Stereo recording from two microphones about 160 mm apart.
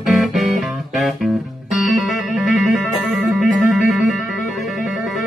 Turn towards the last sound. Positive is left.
turn(degrees=0)  # may be behind; listen again after turning